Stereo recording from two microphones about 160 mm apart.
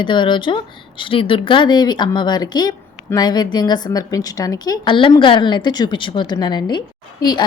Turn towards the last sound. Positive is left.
turn(degrees=25)  # may be behind; listen again after turning